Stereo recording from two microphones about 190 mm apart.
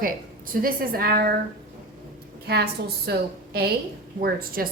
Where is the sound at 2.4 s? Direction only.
60° right (ahead or behind).